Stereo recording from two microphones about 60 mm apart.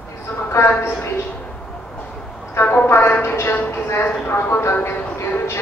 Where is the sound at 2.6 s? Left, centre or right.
Left.